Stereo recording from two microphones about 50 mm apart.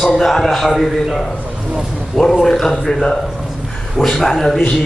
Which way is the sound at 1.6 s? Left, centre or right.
Centre.